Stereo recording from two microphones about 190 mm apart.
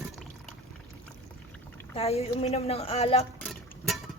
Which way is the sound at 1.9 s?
30° left (ahead or behind).